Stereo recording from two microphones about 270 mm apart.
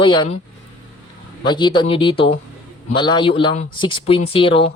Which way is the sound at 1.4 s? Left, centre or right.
Centre.